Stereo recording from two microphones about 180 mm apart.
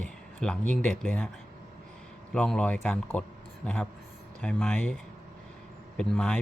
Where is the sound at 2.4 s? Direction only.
5° left (ahead or behind).